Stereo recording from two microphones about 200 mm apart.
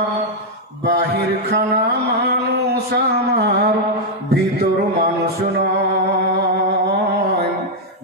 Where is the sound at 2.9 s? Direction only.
50° right (ahead or behind).